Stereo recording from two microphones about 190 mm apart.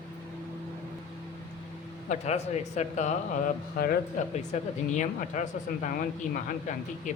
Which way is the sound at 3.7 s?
55° left (ahead or behind).